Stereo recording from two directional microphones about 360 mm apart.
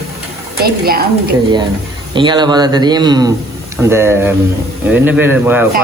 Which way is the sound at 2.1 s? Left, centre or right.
Centre.